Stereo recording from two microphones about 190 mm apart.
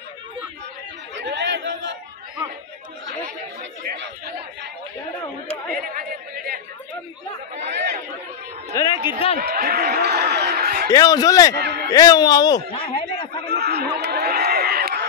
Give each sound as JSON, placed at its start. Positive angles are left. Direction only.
{"t": 1.1, "sound": "chatter", "side_deg": -65}
{"t": 5.8, "sound": "chatter", "side_deg": -50}
{"t": 7.6, "sound": "chatter", "side_deg": -65}
{"t": 8.7, "sound": "a sound", "side_deg": 25}
{"t": 9.4, "sound": "a sound", "side_deg": -55}
{"t": 10.9, "sound": "a man's voice", "side_deg": 20}
{"t": 11.5, "sound": "a man's voice", "side_deg": -60}
{"t": 11.9, "sound": "speech", "side_deg": 20}
{"t": 13.5, "sound": "a sound", "side_deg": -60}